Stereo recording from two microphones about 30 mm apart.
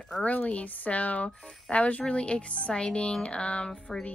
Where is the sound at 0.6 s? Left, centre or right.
Left.